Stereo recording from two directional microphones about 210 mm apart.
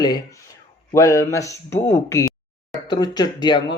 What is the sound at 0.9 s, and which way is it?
A man's voice, 15° left (ahead or behind).